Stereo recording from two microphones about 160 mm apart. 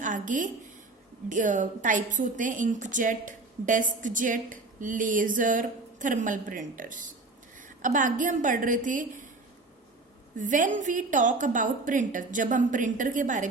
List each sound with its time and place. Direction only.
0.0 s a woman's voice: 55° right (ahead or behind)
10.3 s a woman's voice: 55° right (ahead or behind)